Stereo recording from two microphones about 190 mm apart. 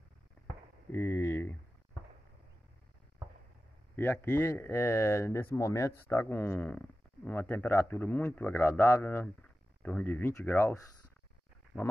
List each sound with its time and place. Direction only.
0.9 s speech: 15° left (ahead or behind)
3.9 s speech: 10° left (ahead or behind)